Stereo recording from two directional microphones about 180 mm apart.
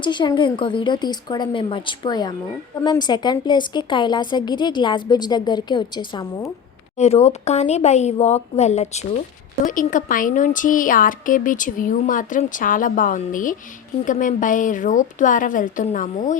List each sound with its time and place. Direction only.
0.0 s a woman's voice: 25° left (ahead or behind)
7.0 s speech: 35° left (ahead or behind)
9.7 s speech: 50° left (ahead or behind)